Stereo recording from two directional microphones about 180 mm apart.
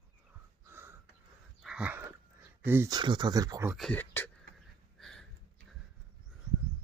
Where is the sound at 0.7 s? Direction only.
15° right (ahead or behind).